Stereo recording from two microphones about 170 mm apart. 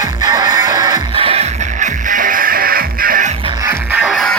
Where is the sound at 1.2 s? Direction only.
35° right (ahead or behind); by 3.3 s 55° right (ahead or behind).